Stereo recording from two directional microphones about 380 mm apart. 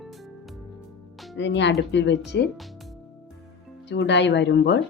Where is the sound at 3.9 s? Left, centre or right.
Left.